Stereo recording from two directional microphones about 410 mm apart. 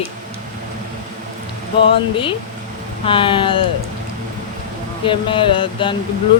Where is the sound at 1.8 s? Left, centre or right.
Centre.